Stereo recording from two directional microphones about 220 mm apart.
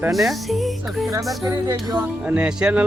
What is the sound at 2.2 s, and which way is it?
Speech, 5° right (ahead or behind).